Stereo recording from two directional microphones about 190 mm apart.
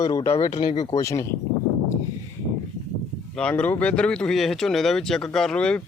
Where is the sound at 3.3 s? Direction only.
5° left (ahead or behind).